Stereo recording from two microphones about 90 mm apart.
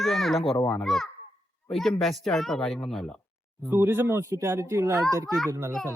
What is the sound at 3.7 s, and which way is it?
Speech, 25° right (ahead or behind).